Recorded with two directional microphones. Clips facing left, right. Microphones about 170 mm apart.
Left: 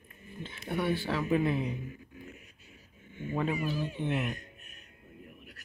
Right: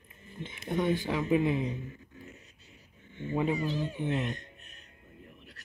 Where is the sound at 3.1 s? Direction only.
20° right (ahead or behind).